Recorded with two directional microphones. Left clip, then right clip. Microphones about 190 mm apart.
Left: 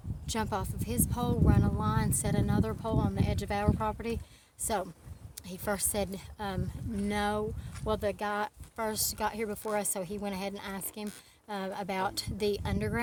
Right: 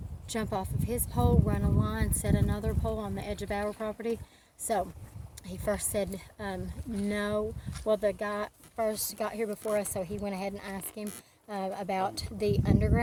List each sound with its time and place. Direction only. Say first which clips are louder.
0.3 s speech: even; 20° left (ahead or behind)